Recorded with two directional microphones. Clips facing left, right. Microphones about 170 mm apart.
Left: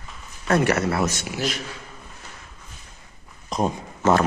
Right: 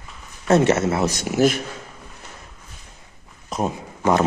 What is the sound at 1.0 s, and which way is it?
Speech, 40° right (ahead or behind).